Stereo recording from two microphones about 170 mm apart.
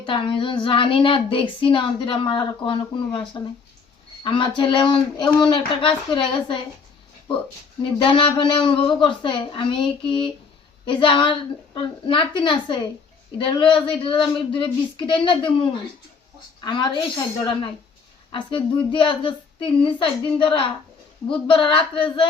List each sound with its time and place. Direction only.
0.0 s a woman's voice: 30° left (ahead or behind)
8.0 s a woman's voice: 30° left (ahead or behind)
16.6 s a woman's voice: 25° left (ahead or behind)